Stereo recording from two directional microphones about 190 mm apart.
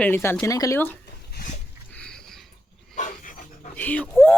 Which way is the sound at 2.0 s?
5° left (ahead or behind).